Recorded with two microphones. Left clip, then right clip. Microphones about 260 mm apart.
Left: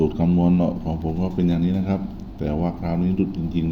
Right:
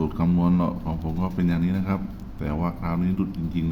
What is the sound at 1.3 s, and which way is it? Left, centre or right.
A man's voice, centre.